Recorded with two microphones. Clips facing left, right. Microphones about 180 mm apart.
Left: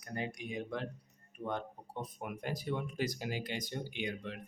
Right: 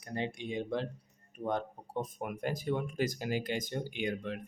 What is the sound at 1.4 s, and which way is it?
Speech, 40° right (ahead or behind).